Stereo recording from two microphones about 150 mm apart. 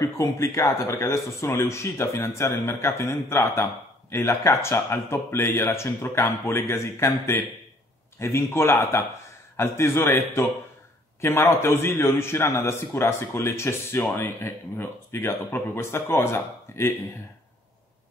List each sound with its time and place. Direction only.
0.0 s a man's voice: 20° left (ahead or behind)